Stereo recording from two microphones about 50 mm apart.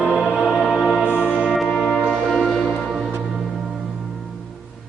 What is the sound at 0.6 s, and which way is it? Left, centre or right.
Music, centre.